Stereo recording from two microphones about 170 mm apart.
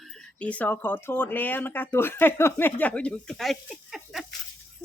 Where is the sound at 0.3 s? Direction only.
10° left (ahead or behind).